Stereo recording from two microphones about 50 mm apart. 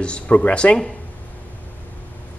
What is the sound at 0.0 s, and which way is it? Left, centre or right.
Speech, left.